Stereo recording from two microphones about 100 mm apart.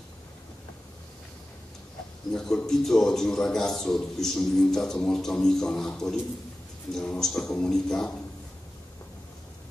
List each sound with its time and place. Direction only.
2.3 s a man's voice: 5° left (ahead or behind)